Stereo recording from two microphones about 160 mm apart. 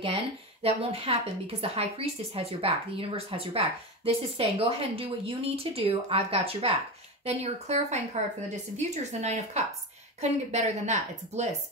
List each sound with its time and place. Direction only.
0.0 s a woman's voice: 35° right (ahead or behind)